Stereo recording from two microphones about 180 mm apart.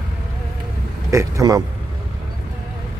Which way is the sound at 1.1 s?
15° right (ahead or behind).